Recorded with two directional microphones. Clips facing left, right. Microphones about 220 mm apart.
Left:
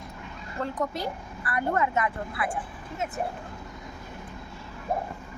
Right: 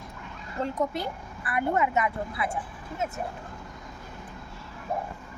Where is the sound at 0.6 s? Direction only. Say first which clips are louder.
Right 1 dB; 20° right (ahead or behind).